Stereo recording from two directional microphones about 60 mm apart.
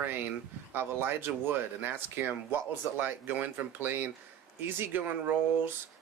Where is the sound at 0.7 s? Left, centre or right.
Right.